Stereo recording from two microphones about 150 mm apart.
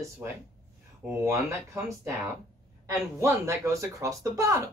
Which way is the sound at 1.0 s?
20° right (ahead or behind).